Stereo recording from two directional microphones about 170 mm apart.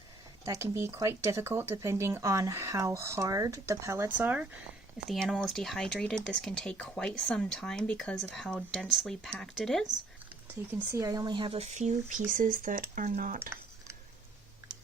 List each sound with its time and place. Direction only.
0.4 s speech: 15° right (ahead or behind)
5.0 s speech: centre (ahead or behind)
10.7 s speech: 15° right (ahead or behind); by 13.4 s 50° right (ahead or behind)
13.4 s a sound: 15° right (ahead or behind)